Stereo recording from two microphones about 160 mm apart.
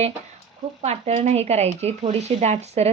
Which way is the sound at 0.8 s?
45° right (ahead or behind).